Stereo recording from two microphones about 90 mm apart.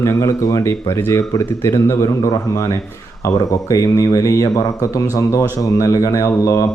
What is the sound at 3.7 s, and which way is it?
A man's voice, 35° left (ahead or behind).